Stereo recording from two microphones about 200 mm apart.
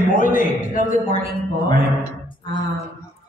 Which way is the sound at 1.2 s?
25° left (ahead or behind).